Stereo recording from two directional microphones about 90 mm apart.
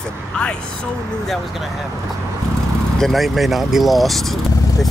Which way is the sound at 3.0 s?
Centre (ahead or behind).